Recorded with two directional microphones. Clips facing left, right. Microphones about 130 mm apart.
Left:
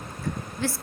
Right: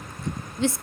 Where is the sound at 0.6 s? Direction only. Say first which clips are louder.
Right 5 dB; 20° right (ahead or behind).